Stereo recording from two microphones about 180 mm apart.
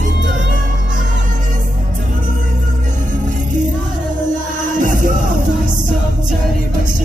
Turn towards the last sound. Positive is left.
turn(degrees=-45)  # may be behind; listen again after turning